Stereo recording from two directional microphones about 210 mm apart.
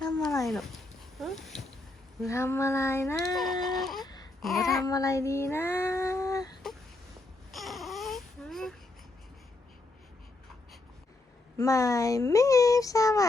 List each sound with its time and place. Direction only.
0.4 s dog: centre (ahead or behind)
1.2 s a sound: centre (ahead or behind)
2.2 s speech: 15° left (ahead or behind)
3.6 s a sound: centre (ahead or behind)
4.0 s a sound: 20° left (ahead or behind)
4.4 s babbling: centre (ahead or behind)
4.8 s child singing: 15° left (ahead or behind)
7.5 s baby cry: centre (ahead or behind)
11.5 s speech: 15° left (ahead or behind)